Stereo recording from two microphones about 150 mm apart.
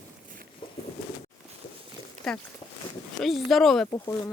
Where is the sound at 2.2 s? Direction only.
Centre (ahead or behind).